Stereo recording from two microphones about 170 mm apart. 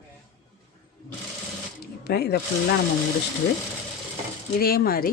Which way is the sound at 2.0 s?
70° left (ahead or behind).